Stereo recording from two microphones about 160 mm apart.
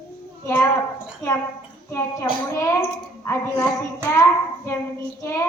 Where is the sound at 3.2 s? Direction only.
15° left (ahead or behind).